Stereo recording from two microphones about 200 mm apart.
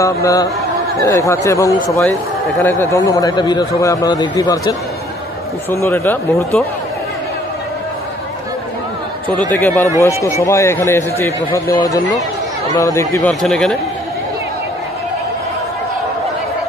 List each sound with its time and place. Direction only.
0.0 s a man's voice: 15° left (ahead or behind)
5.7 s a man's voice: 10° left (ahead or behind)
9.5 s a man's voice: 10° left (ahead or behind)
13.4 s speech: centre (ahead or behind)